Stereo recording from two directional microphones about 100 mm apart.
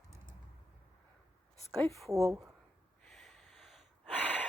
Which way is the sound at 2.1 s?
30° right (ahead or behind).